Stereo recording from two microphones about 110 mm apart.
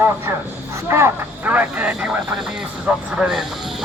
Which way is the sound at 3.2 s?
5° right (ahead or behind).